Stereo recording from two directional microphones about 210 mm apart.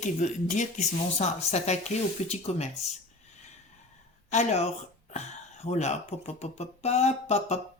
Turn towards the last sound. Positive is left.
turn(degrees=30)  # may be behind; listen again after turning